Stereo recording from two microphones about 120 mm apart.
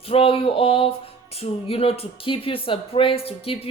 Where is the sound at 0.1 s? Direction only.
50° left (ahead or behind).